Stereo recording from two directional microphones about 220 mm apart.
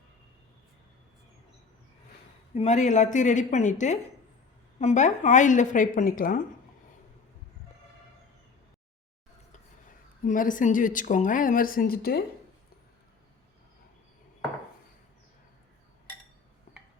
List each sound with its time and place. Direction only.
2.6 s speech: 30° left (ahead or behind)
10.2 s speech: 35° left (ahead or behind)